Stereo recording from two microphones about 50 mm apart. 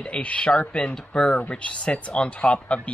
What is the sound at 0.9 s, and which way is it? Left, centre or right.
Speech, centre.